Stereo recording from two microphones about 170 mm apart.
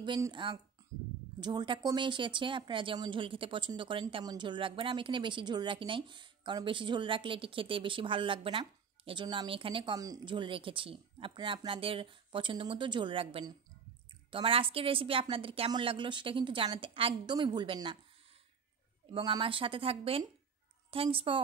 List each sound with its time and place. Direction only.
0.0 s a woman's voice: 25° right (ahead or behind)
19.1 s a woman's voice: 30° right (ahead or behind)